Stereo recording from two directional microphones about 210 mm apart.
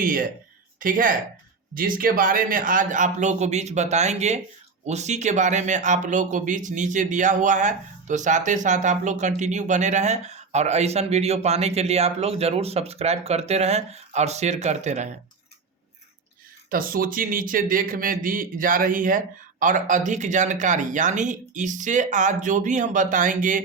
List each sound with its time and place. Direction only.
0.0 s speech: 40° right (ahead or behind)
16.6 s speech: 40° right (ahead or behind)